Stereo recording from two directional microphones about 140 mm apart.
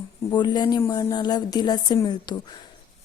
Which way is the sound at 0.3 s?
30° left (ahead or behind).